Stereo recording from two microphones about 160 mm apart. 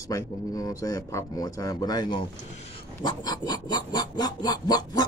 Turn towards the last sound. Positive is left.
turn(degrees=25)  # may be behind; listen again after turning